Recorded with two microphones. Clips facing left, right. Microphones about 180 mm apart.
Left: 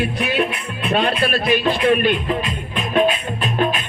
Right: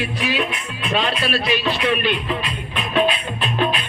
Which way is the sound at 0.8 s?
55° left (ahead or behind).